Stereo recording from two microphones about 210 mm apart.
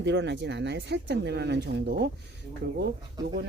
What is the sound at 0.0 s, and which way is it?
Speech, 55° right (ahead or behind).